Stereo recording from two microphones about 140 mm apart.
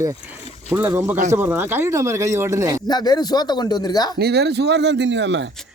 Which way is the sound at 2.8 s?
30° left (ahead or behind).